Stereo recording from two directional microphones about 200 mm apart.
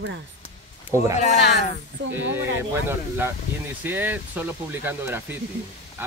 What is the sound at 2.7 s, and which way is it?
Speech, 10° right (ahead or behind).